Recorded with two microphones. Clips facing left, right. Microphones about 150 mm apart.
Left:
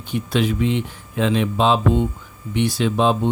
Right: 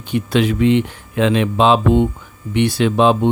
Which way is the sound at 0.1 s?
75° right (ahead or behind).